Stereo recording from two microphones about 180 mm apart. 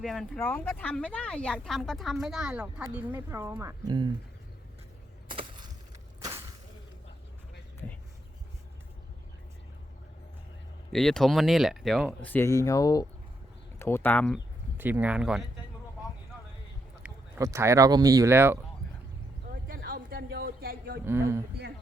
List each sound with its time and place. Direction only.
0.0 s speech: centre (ahead or behind)
3.8 s speech: 25° right (ahead or behind)
5.3 s a sound: 25° right (ahead or behind)
10.9 s speech: centre (ahead or behind)
14.8 s speech: 10° right (ahead or behind)
17.0 s speech: 15° right (ahead or behind)
19.5 s a sound: 55° right (ahead or behind)
21.0 s speech: 15° right (ahead or behind)